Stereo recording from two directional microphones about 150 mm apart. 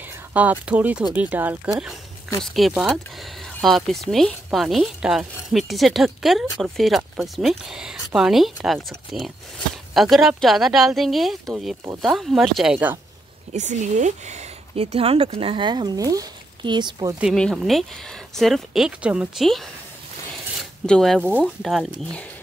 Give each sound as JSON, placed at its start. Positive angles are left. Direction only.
{"t": 0.3, "sound": "speech", "side_deg": -10}
{"t": 1.8, "sound": "a sound", "side_deg": -5}
{"t": 2.4, "sound": "speech", "side_deg": 0}
{"t": 13.5, "sound": "speech", "side_deg": -50}
{"t": 17.2, "sound": "speech", "side_deg": 0}
{"t": 20.8, "sound": "speech", "side_deg": 5}
{"t": 21.2, "sound": "speech", "side_deg": -10}